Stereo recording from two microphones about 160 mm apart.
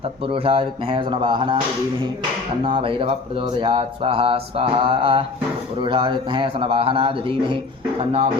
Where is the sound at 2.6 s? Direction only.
35° right (ahead or behind).